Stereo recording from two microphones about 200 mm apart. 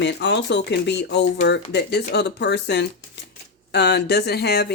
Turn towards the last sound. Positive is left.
turn(degrees=55)  # may be behind; listen again after turning